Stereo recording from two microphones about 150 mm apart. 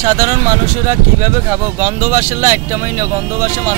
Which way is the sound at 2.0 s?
20° right (ahead or behind).